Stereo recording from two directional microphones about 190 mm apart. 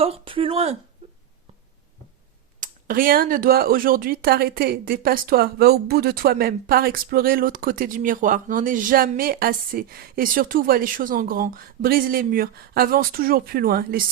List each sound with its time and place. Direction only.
0.0 s speech: 30° right (ahead or behind)
2.6 s speech: 45° right (ahead or behind)